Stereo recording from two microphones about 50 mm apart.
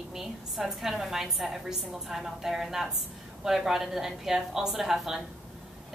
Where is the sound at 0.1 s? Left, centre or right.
Centre.